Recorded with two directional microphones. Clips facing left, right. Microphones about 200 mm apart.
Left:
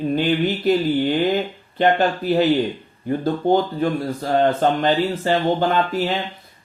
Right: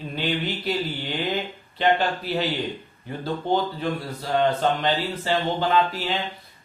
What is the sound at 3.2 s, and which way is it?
Speech, 50° left (ahead or behind).